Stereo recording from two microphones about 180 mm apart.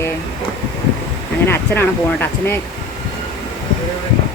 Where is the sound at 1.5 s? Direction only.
10° left (ahead or behind).